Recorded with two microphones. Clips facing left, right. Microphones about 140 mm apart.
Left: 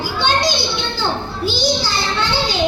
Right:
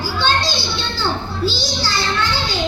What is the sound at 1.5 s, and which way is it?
Child singing, 15° left (ahead or behind).